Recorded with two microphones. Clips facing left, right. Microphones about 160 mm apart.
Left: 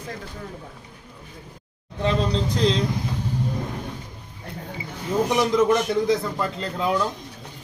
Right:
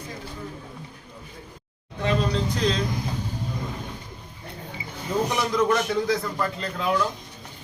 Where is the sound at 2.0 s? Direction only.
30° left (ahead or behind).